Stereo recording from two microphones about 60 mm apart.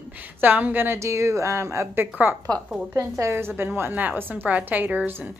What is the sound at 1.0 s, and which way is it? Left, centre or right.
Speech, right.